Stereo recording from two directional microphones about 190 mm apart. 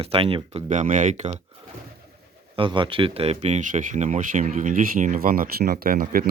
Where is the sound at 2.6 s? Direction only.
25° right (ahead or behind).